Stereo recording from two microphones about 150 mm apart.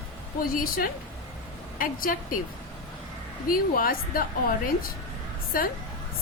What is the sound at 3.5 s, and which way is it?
A woman's voice, 75° left (ahead or behind).